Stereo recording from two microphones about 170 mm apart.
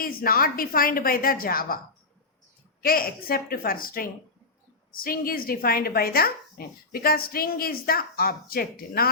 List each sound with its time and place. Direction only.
0.0 s speech: 60° left (ahead or behind)
2.8 s speech: 60° left (ahead or behind)